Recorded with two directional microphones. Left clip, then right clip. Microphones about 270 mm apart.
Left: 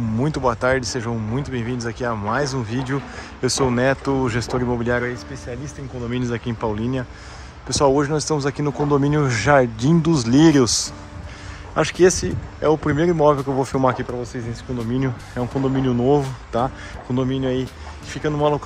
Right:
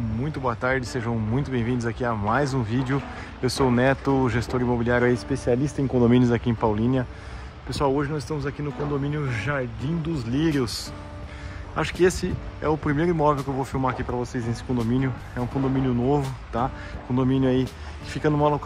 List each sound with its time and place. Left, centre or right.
0.2 s speech: centre
7.7 s speech: centre